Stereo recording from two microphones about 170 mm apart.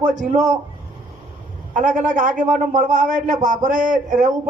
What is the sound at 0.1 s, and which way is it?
Speech, 45° right (ahead or behind).